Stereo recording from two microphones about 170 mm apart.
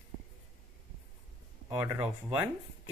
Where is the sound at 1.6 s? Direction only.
15° right (ahead or behind).